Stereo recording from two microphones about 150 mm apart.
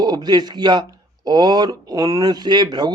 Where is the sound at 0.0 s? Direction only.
30° right (ahead or behind).